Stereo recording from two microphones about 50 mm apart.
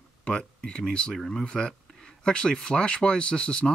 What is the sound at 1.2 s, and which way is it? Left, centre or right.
Speech, centre.